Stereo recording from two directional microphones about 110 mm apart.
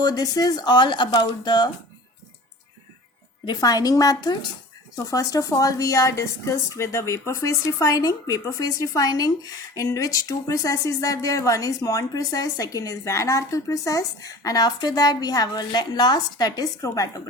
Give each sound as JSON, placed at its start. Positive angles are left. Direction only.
{"t": 0.0, "sound": "a woman's voice", "side_deg": 35}
{"t": 3.4, "sound": "a woman's voice", "side_deg": 35}